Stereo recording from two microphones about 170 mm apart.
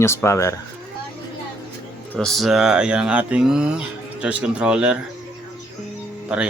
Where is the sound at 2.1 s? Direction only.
Centre (ahead or behind).